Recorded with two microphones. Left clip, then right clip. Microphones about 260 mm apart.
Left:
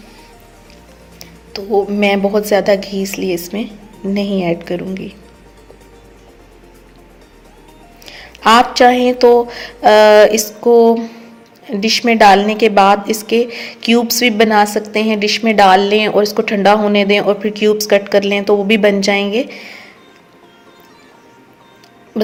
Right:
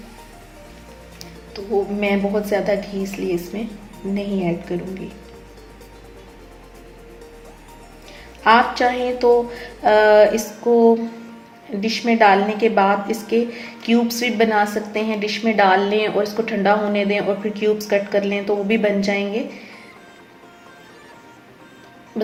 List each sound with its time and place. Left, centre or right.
1.5 s a woman's voice: left
8.0 s a woman's voice: left
22.1 s music: left